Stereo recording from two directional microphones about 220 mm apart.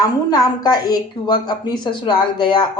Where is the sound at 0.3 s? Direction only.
15° left (ahead or behind).